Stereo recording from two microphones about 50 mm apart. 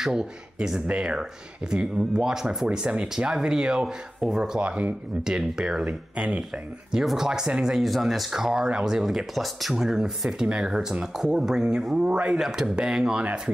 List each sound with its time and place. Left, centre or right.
0.0 s speech: centre
4.6 s speech: right
5.2 s speech: centre
6.1 s speech: right
7.2 s speech: centre
8.3 s speech: centre